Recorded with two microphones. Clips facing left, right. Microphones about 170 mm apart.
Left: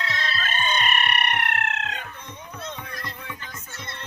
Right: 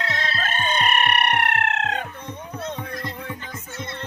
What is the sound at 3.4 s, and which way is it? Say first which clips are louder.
Music: right 5 dB; 20° right (ahead or behind).